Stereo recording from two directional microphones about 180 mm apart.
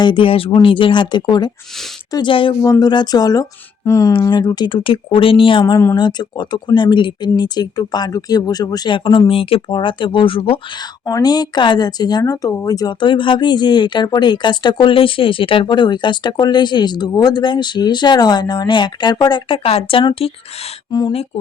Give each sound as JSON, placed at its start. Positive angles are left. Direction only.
{"t": 0.0, "sound": "speech", "side_deg": 30}
{"t": 5.7, "sound": "speech", "side_deg": 15}